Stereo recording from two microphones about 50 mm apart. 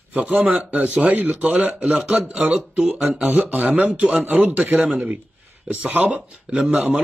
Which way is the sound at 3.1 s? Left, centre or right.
Right.